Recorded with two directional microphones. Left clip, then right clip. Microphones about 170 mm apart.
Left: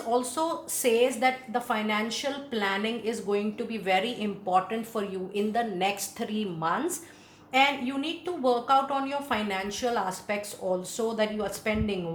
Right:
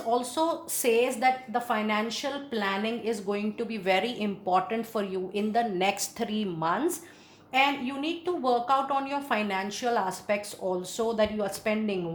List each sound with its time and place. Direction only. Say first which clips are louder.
0.1 s a woman's voice: right 1 dB; 30° right (ahead or behind)